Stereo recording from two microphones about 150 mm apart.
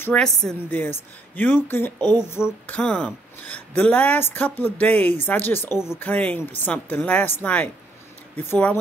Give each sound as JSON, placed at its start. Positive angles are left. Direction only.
{"t": 0.0, "sound": "a woman's voice", "side_deg": 5}
{"t": 2.0, "sound": "speech", "side_deg": -25}
{"t": 2.2, "sound": "speech", "side_deg": 15}